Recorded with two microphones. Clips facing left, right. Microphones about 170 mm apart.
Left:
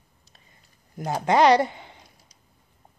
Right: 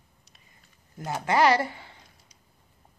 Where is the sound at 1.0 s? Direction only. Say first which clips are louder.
Left 4 dB; 35° left (ahead or behind).